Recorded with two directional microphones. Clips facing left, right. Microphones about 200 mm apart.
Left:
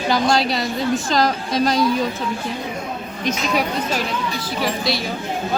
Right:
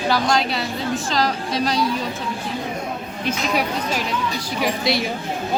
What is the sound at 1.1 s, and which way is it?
Speech, 45° left (ahead or behind).